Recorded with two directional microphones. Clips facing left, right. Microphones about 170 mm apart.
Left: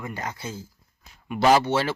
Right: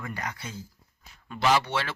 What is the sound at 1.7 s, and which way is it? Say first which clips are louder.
Speech: left 7 dB; 35° left (ahead or behind).